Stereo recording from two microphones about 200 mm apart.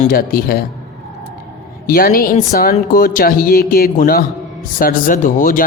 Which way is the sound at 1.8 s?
50° left (ahead or behind).